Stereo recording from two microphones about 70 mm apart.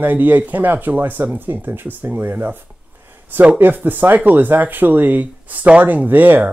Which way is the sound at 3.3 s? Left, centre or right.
Centre.